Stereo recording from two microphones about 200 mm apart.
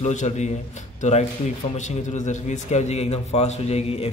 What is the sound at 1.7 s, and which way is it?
A man's voice, 35° left (ahead or behind).